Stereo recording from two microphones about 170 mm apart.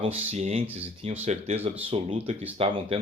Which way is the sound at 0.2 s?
40° right (ahead or behind).